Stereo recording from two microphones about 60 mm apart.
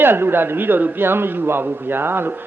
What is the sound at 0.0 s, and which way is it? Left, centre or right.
A man's voice, right.